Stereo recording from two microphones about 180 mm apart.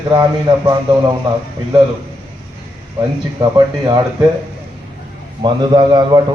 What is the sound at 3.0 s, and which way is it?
Speech, 20° right (ahead or behind).